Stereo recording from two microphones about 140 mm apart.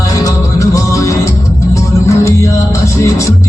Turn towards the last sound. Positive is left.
turn(degrees=20)  # may be behind; listen again after turning